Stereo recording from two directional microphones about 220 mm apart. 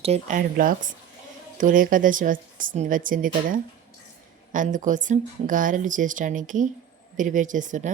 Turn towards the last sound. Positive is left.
turn(degrees=-35)  # may be behind; listen again after turning